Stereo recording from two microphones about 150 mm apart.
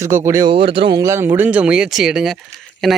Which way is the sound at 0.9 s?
20° right (ahead or behind).